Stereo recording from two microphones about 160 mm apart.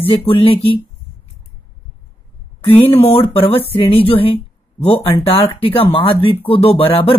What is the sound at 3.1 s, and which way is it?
Speech, 35° left (ahead or behind).